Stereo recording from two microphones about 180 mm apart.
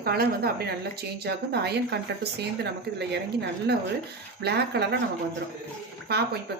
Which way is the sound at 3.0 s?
70° right (ahead or behind).